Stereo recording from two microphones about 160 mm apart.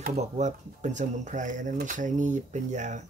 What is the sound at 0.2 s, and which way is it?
Speech, 45° right (ahead or behind).